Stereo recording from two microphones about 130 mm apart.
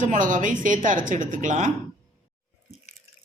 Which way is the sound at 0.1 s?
80° right.